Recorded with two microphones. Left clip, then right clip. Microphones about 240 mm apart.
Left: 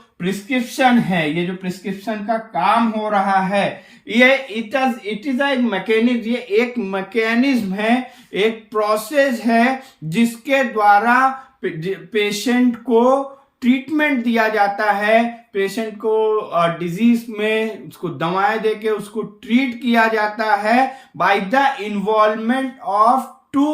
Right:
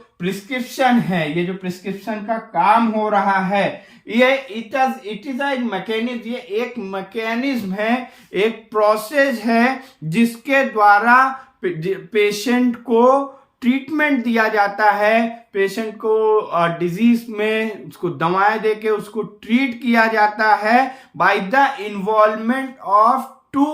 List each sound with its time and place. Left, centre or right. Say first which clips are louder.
0.2 s speech: left 2 dB; centre
4.1 s speech: left 2 dB; centre